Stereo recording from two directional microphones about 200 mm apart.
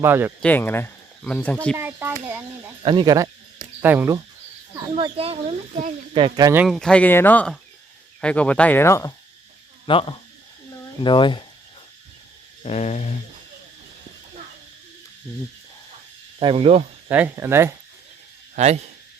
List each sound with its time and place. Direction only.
0.0 s a child's voice: 10° right (ahead or behind)
0.4 s speech: 10° left (ahead or behind)
1.7 s a child's voice: 10° right (ahead or behind)
2.8 s speech: 20° right (ahead or behind)
4.9 s speech: 25° right (ahead or behind)
6.6 s speech: centre (ahead or behind)
9.8 s speech: 25° left (ahead or behind)
12.6 s a sound: 35° left (ahead or behind)
16.4 s speech: 25° right (ahead or behind)
17.1 s a child's voice: 10° right (ahead or behind)
18.5 s speech: 35° right (ahead or behind)